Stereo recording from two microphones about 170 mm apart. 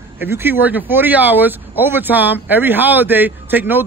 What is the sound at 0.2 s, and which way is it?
Speech, 10° right (ahead or behind).